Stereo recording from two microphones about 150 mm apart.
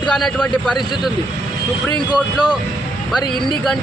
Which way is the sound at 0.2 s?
10° left (ahead or behind).